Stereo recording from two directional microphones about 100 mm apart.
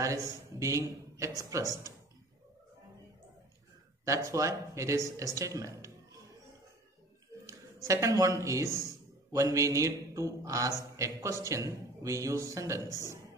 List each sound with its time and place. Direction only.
0.0 s a man's voice: 30° right (ahead or behind)
4.0 s a man's voice: 30° right (ahead or behind)
7.4 s a man's voice: 30° right (ahead or behind)